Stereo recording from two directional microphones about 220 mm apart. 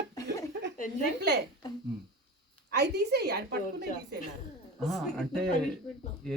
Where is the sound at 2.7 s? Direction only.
50° right (ahead or behind).